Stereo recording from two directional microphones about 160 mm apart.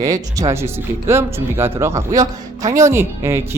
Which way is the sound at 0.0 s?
20° right (ahead or behind).